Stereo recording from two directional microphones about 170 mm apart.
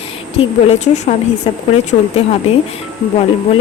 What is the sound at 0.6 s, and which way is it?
A woman's voice, 40° left (ahead or behind).